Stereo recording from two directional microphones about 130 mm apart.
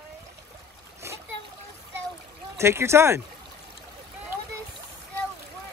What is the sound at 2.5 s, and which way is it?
Speech, 20° right (ahead or behind).